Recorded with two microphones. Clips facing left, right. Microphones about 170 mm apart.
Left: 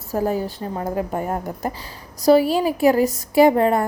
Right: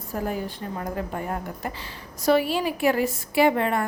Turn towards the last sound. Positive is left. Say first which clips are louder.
# left 6 dB
turn(degrees=40)  # may be behind; listen again after turning